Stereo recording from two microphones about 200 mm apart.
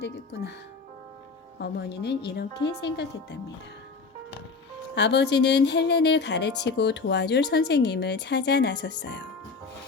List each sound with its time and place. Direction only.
0.0 s speech: 55° left (ahead or behind)
1.5 s speech: 55° left (ahead or behind)
4.9 s speech: 60° left (ahead or behind)